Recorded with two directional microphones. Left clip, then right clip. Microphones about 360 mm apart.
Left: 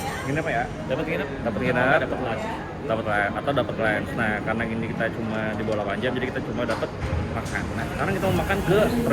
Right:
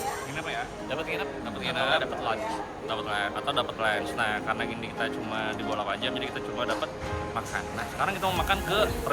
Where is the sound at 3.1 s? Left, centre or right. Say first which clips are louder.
Left 4 dB; centre.